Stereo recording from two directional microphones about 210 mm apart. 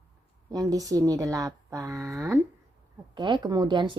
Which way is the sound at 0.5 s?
15° right (ahead or behind).